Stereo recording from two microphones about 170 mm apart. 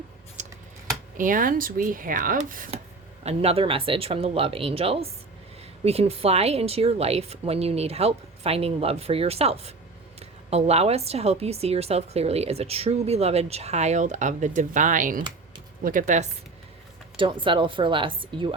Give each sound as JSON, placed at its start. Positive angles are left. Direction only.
{"t": 0.4, "sound": "a sound", "side_deg": -45}
{"t": 1.1, "sound": "speech", "side_deg": -50}
{"t": 3.2, "sound": "a woman's voice", "side_deg": -35}
{"t": 17.2, "sound": "a woman's voice", "side_deg": -30}